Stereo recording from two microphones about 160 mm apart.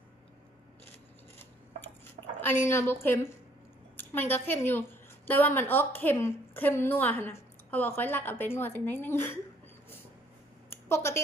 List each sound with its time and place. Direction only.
2.4 s a woman's voice: 15° left (ahead or behind)
10.8 s speech: 15° left (ahead or behind)